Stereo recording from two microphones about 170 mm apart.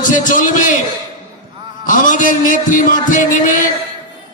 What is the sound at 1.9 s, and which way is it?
A man's voice, 50° left (ahead or behind).